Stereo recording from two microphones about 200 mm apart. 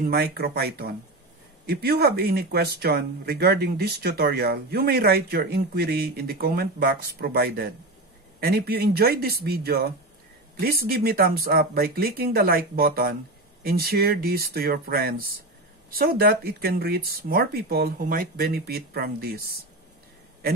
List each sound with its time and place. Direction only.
0.0 s speech: 50° right (ahead or behind)